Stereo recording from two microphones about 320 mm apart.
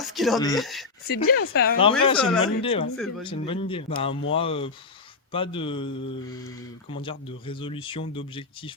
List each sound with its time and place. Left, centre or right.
0.1 s speech: centre
0.3 s speech: centre
0.6 s speech: centre
1.0 s speech: left
2.1 s speech: centre
2.4 s speech: centre
2.9 s speech: centre
3.2 s speech: centre
4.1 s speech: left
4.4 s speech: centre
7.0 s speech: centre